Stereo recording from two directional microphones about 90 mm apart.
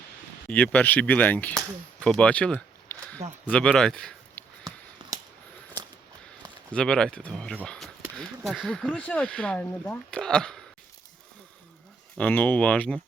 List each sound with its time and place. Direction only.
0.5 s speech: 15° left (ahead or behind)
2.0 s a sound: 10° left (ahead or behind)
3.5 s speech: 10° left (ahead or behind)
4.4 s a sound: 20° left (ahead or behind)
6.7 s speech: 10° left (ahead or behind)
12.1 s speech: 15° left (ahead or behind)